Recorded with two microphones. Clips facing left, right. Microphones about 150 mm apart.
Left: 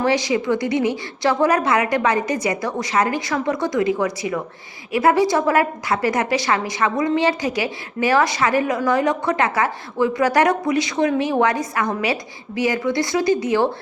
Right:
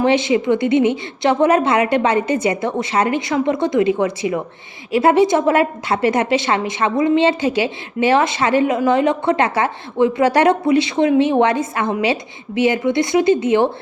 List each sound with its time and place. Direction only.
0.0 s a woman's voice: 25° right (ahead or behind)